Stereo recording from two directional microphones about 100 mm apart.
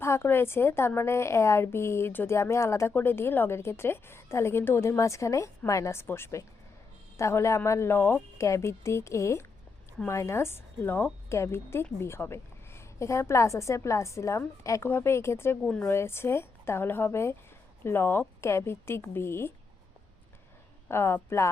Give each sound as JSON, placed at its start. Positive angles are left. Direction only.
{"t": 0.0, "sound": "a woman's voice", "side_deg": 25}
{"t": 20.8, "sound": "a woman's voice", "side_deg": 25}